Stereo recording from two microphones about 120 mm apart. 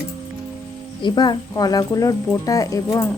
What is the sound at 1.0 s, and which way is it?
Speech, 35° left (ahead or behind).